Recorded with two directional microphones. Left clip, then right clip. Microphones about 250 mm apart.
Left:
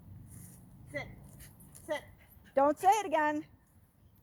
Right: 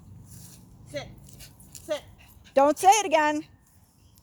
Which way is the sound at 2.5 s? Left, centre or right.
Right.